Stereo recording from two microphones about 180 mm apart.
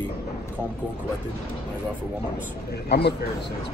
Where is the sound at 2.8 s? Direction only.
65° left (ahead or behind).